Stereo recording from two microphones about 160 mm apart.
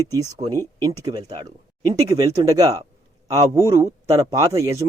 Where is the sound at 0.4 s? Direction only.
35° right (ahead or behind).